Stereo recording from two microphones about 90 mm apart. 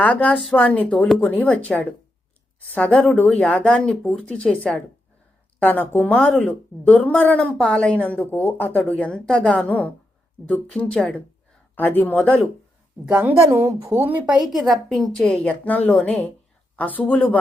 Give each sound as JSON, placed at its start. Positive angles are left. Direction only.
{"t": 0.0, "sound": "speech", "side_deg": 15}
{"t": 9.0, "sound": "speech", "side_deg": 10}
{"t": 13.1, "sound": "a woman's voice", "side_deg": -15}
{"t": 13.3, "sound": "a woman's voice", "side_deg": -35}